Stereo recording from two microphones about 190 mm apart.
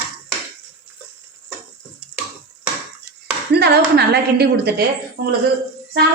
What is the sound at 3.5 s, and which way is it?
A woman's voice, 60° right (ahead or behind).